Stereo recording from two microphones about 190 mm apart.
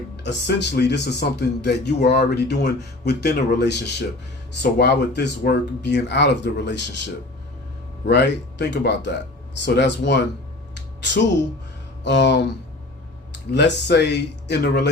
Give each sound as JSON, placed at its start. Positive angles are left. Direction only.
{"t": 0.2, "sound": "speech", "side_deg": 65}
{"t": 10.8, "sound": "a sound", "side_deg": 70}
{"t": 12.0, "sound": "speech", "side_deg": 65}
{"t": 13.5, "sound": "speech", "side_deg": 60}